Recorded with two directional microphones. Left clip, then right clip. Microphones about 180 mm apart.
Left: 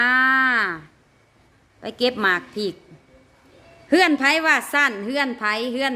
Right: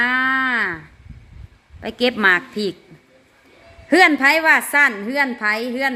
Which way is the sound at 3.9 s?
Centre (ahead or behind).